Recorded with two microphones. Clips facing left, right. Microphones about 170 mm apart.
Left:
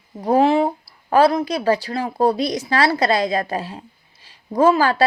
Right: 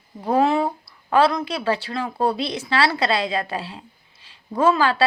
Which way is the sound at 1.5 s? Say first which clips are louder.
Left 4 dB; 40° left (ahead or behind).